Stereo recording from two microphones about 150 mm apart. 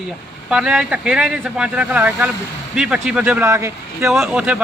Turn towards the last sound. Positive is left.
turn(degrees=-5)  # may be behind; listen again after turning